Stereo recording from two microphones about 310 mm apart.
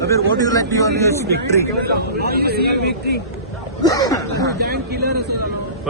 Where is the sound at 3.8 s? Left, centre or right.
Centre.